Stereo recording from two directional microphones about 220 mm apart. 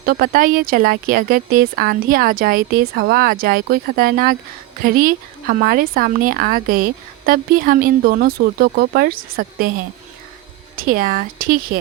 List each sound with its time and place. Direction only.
0.0 s speech: 40° right (ahead or behind)
10.8 s speech: 40° right (ahead or behind)